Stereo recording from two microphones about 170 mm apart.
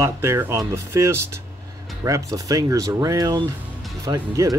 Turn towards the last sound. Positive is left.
turn(degrees=-20)  # may be behind; listen again after turning